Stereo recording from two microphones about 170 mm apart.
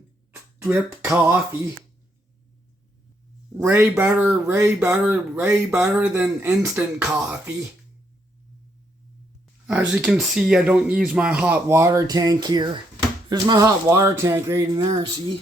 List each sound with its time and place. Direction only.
0.7 s speech: 15° right (ahead or behind)
3.6 s speech: 15° right (ahead or behind)
9.6 s speech: 10° right (ahead or behind); by 15.4 s 25° right (ahead or behind)